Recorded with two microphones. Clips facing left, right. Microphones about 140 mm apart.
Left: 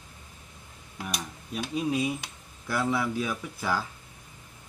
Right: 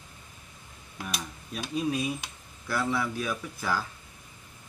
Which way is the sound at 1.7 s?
15° left (ahead or behind).